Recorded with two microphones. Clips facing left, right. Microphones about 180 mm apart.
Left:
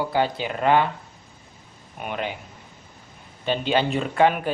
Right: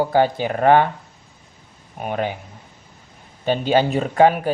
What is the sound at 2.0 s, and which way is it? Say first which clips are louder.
Speech: right 5 dB; 40° right (ahead or behind).